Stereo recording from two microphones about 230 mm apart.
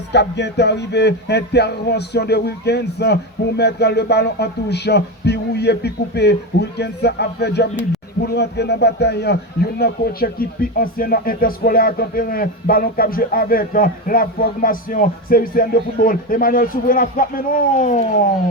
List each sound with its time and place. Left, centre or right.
0.1 s a man's voice: left